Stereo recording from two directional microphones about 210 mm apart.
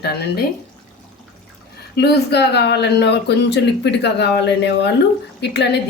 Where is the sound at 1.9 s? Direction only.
50° left (ahead or behind).